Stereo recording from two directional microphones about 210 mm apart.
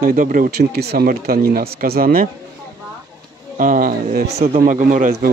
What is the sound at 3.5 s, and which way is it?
Speech, 40° right (ahead or behind).